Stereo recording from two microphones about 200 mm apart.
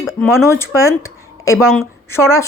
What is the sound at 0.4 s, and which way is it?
Speech, 15° left (ahead or behind).